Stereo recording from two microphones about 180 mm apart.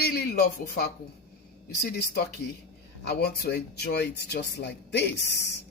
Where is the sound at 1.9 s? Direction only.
60° left (ahead or behind).